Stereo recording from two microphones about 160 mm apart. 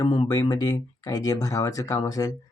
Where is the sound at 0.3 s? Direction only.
25° left (ahead or behind).